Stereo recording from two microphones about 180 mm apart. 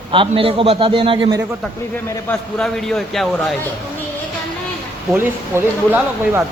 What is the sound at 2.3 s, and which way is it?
A man's voice, 5° left (ahead or behind).